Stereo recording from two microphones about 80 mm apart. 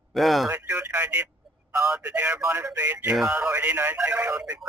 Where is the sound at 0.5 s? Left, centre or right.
Right.